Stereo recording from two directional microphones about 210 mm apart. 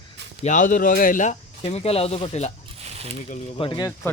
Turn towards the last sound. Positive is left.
turn(degrees=20)  # may be behind; listen again after turning